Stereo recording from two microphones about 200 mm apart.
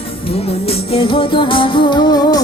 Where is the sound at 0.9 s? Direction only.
25° left (ahead or behind).